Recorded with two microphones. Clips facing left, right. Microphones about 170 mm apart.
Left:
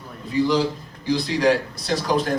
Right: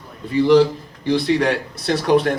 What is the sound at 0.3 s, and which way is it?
A man's voice, 60° right (ahead or behind).